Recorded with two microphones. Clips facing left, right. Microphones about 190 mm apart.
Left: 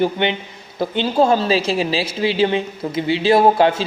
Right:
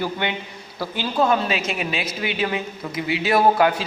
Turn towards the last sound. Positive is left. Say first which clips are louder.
# left 3 dB
turn(degrees=25)  # may be behind; listen again after turning